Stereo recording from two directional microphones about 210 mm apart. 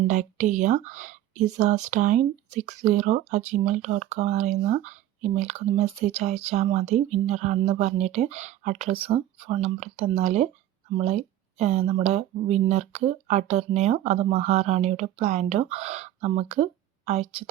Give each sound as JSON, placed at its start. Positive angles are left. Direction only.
{"t": 0.1, "sound": "a woman's voice", "side_deg": -35}